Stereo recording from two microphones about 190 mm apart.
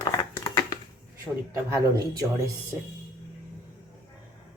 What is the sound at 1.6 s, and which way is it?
Speech, 15° right (ahead or behind).